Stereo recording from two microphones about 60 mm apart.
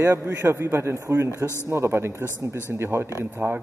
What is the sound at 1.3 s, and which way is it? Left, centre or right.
Speech, left.